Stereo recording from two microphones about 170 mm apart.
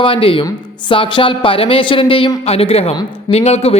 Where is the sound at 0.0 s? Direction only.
30° left (ahead or behind).